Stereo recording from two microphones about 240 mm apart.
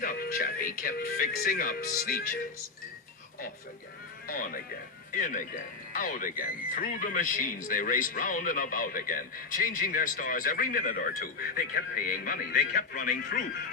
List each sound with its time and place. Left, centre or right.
0.0 s speech: left
4.3 s speech: left